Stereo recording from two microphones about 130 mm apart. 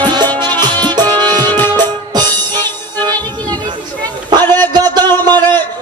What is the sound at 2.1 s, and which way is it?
Music, 35° right (ahead or behind).